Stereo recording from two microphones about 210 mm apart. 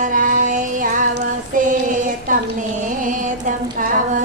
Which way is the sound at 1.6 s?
40° right (ahead or behind).